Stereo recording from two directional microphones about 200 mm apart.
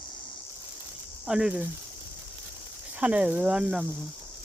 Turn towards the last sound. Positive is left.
turn(degrees=-5)  # may be behind; listen again after turning